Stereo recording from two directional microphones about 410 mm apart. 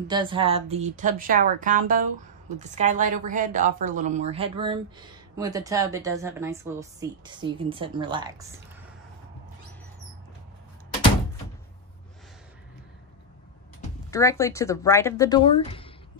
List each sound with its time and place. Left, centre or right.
0.1 s a woman's voice: centre
13.7 s speech: centre